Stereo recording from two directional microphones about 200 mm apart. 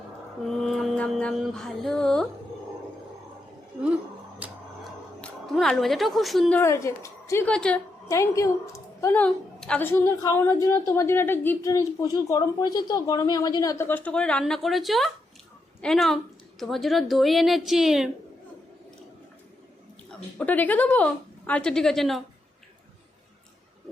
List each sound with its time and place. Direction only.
0.4 s mantra: centre (ahead or behind)
4.4 s a sound: 5° right (ahead or behind)
5.2 s speech: centre (ahead or behind)
6.6 s a woman's voice: 15° left (ahead or behind); by 18.1 s centre (ahead or behind)
20.1 s a woman's voice: 10° left (ahead or behind)